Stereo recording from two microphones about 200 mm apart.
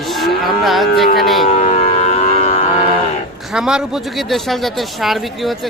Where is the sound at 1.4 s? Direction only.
40° left (ahead or behind).